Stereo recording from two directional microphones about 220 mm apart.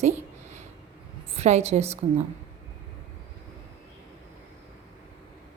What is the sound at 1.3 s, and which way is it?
Speech, 30° right (ahead or behind).